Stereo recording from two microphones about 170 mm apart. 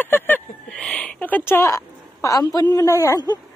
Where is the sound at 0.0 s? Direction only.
10° left (ahead or behind).